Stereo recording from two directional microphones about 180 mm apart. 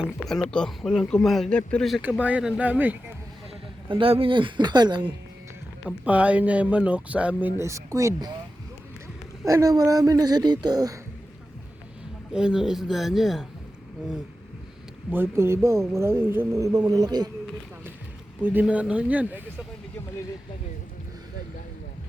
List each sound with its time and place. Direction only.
0.0 s speech: centre (ahead or behind)
2.0 s speech: 10° right (ahead or behind)
3.8 s speech: 30° right (ahead or behind)
5.8 s speech: 5° right (ahead or behind)
9.5 s speech: 20° right (ahead or behind)
12.3 s speech: 5° right (ahead or behind)
15.1 s speech: 10° right (ahead or behind)
18.4 s speech: 10° right (ahead or behind)